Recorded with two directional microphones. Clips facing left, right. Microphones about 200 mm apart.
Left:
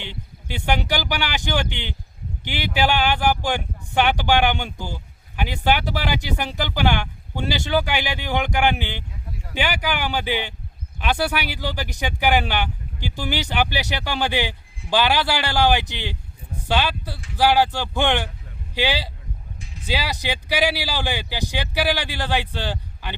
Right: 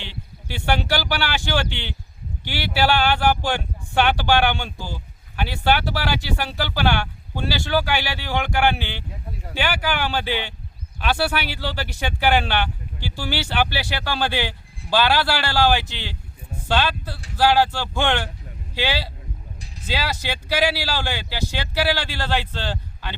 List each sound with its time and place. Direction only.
0.1 s speech: 15° left (ahead or behind)
19.5 s music: 35° right (ahead or behind)
19.8 s speech: 15° left (ahead or behind)